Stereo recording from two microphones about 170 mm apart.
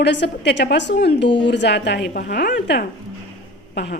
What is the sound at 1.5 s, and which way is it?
A woman's voice, 85° left.